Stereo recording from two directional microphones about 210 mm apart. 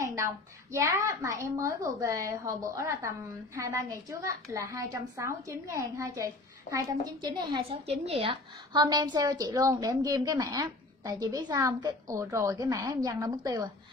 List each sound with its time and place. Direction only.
0.0 s a woman's voice: 15° right (ahead or behind)